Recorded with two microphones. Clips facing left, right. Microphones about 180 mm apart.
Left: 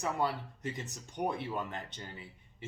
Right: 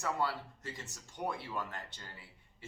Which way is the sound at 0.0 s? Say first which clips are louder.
Left 2 dB; 20° left (ahead or behind).